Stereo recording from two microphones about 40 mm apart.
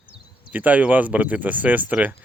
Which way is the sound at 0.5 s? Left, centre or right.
Right.